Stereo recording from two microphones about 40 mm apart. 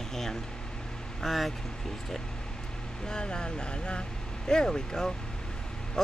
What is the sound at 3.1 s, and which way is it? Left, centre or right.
Speech, centre.